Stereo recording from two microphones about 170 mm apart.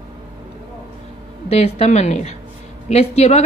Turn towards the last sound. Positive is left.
turn(degrees=40)  # may be behind; listen again after turning